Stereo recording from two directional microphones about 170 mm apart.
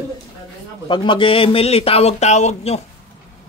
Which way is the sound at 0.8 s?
30° left (ahead or behind).